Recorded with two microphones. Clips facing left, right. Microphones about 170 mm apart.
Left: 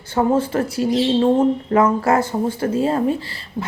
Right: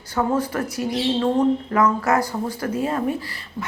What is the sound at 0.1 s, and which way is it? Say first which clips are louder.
Speech: left 4 dB; 25° left (ahead or behind).